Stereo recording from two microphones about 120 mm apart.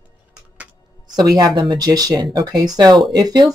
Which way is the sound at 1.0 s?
35° right (ahead or behind).